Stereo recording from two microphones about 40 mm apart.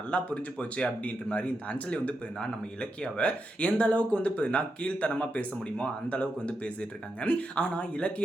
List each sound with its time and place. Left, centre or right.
0.1 s speech: left